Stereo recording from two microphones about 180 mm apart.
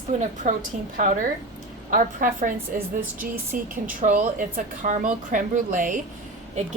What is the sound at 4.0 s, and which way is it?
A woman's voice, 45° right (ahead or behind).